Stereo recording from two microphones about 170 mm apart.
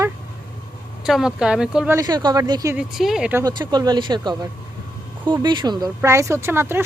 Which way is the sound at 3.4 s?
25° right (ahead or behind).